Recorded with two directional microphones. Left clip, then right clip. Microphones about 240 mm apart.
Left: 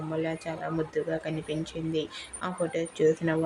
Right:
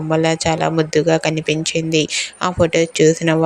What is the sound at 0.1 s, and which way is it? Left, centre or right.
Speech, right.